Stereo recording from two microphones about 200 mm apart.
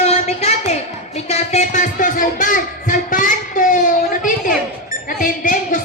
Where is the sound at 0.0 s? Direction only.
35° left (ahead or behind).